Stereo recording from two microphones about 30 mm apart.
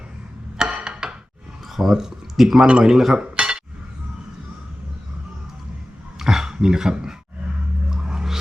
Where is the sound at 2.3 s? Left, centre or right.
Centre.